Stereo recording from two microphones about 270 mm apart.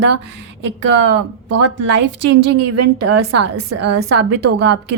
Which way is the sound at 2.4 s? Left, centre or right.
Right.